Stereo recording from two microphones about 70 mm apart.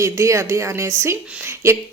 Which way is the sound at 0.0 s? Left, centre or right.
Right.